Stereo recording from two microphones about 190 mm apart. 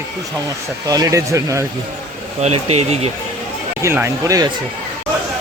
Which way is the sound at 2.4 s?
35° right (ahead or behind).